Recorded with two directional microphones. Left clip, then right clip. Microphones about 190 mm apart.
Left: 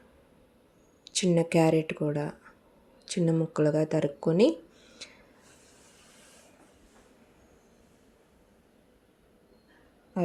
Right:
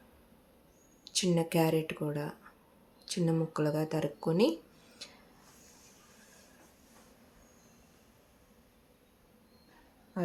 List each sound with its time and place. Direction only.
1.0 s speech: 20° left (ahead or behind)